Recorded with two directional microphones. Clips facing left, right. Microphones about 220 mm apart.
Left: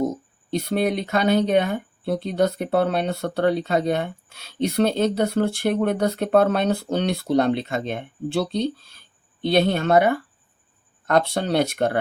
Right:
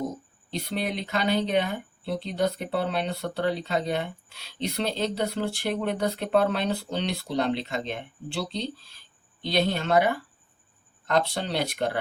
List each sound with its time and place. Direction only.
0.6 s speech: 50° left (ahead or behind)